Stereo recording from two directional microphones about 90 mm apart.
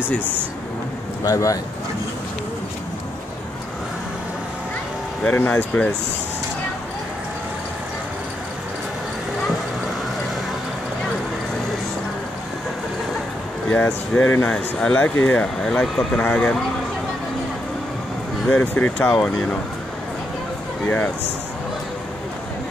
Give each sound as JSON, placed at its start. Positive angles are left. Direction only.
{"t": 0.2, "sound": "speech", "side_deg": -20}
{"t": 1.2, "sound": "speech", "side_deg": 40}
{"t": 5.3, "sound": "speech", "side_deg": 20}
{"t": 13.7, "sound": "speech", "side_deg": 15}
{"t": 18.5, "sound": "speech", "side_deg": 10}